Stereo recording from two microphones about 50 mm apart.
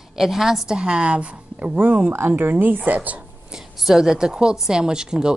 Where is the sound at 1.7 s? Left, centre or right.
Right.